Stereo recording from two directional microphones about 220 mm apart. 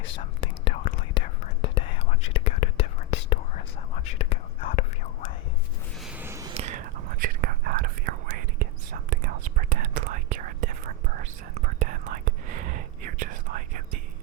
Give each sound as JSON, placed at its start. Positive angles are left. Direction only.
{"t": 0.4, "sound": "whispering", "side_deg": 25}
{"t": 6.1, "sound": "a sound", "side_deg": -10}
{"t": 6.5, "sound": "whispering", "side_deg": -30}